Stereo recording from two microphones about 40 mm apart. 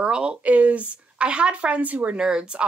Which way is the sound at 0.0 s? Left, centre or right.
Right.